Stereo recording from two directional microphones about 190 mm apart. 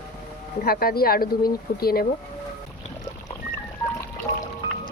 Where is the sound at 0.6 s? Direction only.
55° left (ahead or behind).